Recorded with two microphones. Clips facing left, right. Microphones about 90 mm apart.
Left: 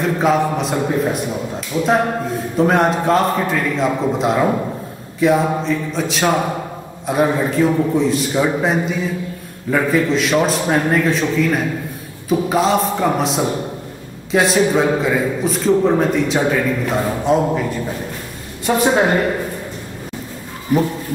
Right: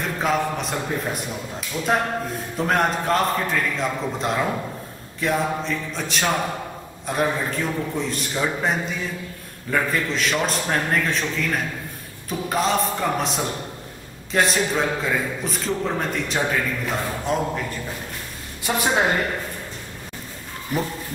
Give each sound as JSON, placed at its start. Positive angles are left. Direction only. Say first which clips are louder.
{"t": 0.0, "sound": "a man's voice", "louder": "left 7 dB", "side_deg": 0}
{"t": 1.7, "sound": "speech", "louder": "left 9 dB", "side_deg": 25}
{"t": 2.5, "sound": "a man's voice", "louder": "left 7 dB", "side_deg": 0}
{"t": 18.7, "sound": "a woman's voice", "louder": "left 7 dB", "side_deg": 15}